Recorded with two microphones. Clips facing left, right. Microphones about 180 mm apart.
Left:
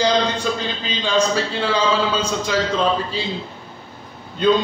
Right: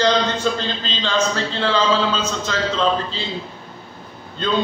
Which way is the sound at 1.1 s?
10° left (ahead or behind).